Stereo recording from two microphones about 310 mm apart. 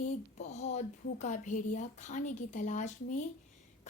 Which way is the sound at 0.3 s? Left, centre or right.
Left.